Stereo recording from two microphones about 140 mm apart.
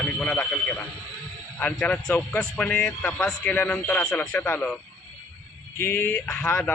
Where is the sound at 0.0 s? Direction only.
Centre (ahead or behind).